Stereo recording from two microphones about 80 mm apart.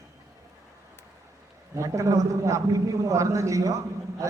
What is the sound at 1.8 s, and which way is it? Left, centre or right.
A man's voice, right.